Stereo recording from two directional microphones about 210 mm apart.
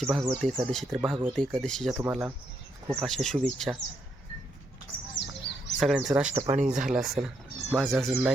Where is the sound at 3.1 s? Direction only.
Centre (ahead or behind).